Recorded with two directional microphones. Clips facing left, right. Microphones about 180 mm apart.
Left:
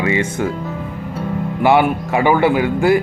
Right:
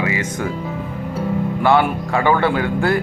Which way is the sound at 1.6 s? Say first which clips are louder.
Left 3 dB; 15° left (ahead or behind).